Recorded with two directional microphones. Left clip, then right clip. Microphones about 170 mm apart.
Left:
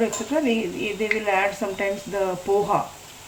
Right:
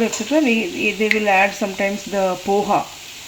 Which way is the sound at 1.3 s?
50° right (ahead or behind).